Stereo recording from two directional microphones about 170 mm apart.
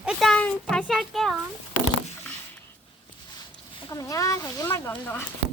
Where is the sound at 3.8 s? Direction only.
20° left (ahead or behind).